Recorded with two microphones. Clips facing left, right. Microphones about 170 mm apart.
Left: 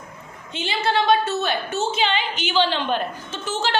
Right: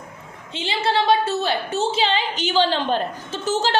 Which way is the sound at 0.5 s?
30° right (ahead or behind).